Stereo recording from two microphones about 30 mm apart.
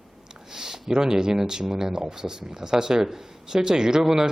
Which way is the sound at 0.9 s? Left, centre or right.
Right.